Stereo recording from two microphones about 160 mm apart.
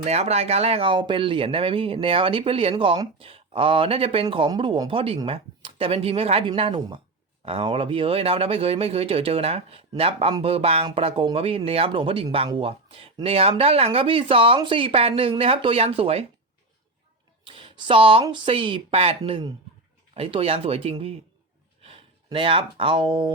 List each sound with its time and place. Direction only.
0.0 s speech: 40° right (ahead or behind)
17.4 s speech: 35° right (ahead or behind)